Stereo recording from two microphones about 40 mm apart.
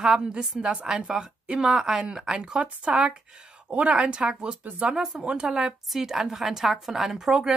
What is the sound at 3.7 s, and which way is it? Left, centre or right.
Speech, right.